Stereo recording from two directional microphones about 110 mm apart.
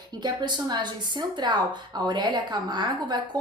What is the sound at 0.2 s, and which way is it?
A woman's voice, 40° right (ahead or behind).